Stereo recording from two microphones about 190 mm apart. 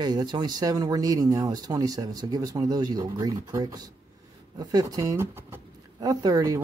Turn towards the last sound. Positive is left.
turn(degrees=-20)  # may be behind; listen again after turning